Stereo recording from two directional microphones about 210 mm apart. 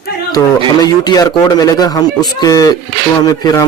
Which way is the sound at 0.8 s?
20° left (ahead or behind).